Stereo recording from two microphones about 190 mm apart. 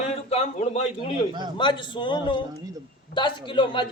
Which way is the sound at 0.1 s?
35° left (ahead or behind).